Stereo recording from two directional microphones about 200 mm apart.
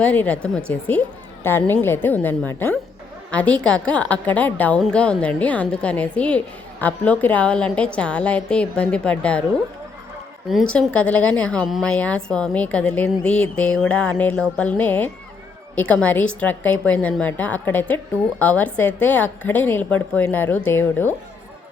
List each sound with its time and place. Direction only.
0.0 s a woman's voice: 5° left (ahead or behind)
10.5 s a woman's voice: 5° left (ahead or behind)